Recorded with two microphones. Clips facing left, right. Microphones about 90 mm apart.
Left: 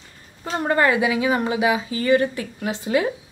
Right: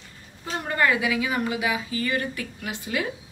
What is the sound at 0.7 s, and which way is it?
A woman's voice, 30° left (ahead or behind).